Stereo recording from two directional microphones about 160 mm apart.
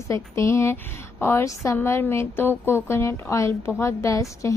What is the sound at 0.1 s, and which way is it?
A woman's voice, 15° left (ahead or behind).